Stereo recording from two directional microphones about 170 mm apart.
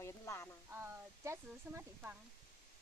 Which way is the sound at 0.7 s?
15° right (ahead or behind).